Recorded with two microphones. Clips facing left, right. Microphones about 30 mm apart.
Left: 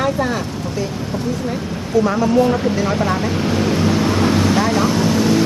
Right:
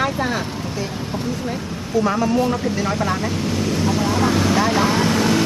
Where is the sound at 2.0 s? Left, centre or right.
Centre.